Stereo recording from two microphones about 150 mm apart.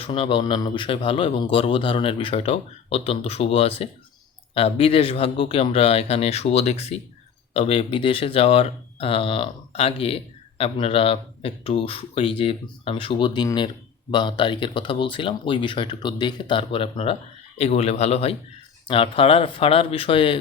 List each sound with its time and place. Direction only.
0.0 s a man's voice: 35° left (ahead or behind)